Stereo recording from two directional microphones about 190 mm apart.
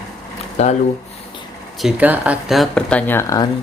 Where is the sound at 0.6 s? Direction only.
35° left (ahead or behind).